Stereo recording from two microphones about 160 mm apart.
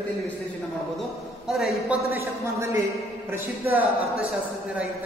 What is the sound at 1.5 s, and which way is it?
Speech, centre (ahead or behind).